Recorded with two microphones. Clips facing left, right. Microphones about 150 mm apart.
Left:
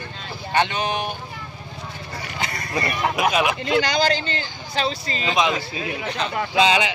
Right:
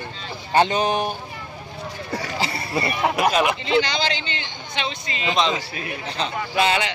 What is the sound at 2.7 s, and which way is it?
Speech, 5° right (ahead or behind).